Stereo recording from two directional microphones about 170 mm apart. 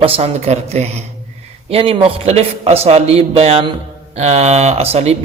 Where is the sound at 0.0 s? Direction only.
35° right (ahead or behind).